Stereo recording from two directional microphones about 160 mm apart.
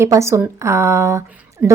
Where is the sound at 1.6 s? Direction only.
5° right (ahead or behind).